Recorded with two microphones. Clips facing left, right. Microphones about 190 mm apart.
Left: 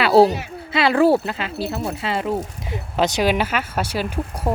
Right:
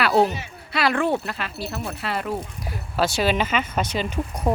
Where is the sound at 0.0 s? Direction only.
35° left (ahead or behind).